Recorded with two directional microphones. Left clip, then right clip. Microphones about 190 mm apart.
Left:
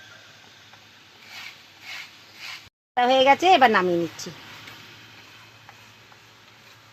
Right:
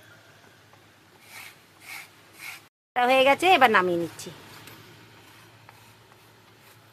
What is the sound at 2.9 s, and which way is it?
Speech, 25° left (ahead or behind).